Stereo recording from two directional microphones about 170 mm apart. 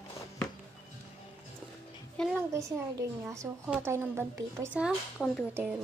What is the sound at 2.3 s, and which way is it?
A child's voice, 15° right (ahead or behind).